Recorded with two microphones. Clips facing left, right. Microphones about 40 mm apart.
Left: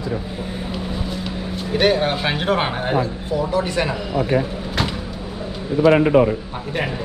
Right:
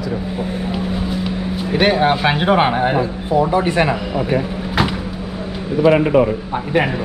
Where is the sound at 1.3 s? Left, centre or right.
Centre.